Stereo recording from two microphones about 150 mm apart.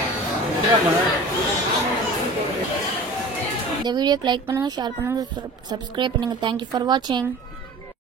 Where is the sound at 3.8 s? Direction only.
30° right (ahead or behind).